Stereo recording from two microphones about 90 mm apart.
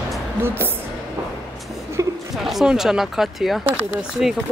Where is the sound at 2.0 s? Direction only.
35° right (ahead or behind).